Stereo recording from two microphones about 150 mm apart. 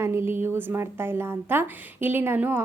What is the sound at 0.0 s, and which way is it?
A woman's voice, 15° right (ahead or behind).